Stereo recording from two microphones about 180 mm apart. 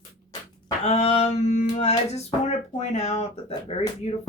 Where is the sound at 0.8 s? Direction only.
35° left (ahead or behind).